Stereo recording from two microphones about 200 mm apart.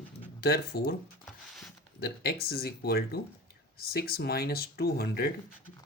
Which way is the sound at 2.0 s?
50° left (ahead or behind).